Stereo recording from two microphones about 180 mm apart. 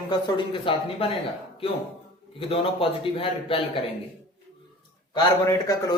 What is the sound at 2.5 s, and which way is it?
A man's voice, 30° left (ahead or behind).